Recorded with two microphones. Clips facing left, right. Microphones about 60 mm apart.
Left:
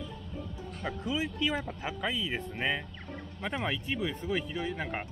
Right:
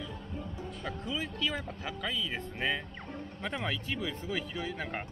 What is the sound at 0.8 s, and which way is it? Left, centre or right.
Speech, centre.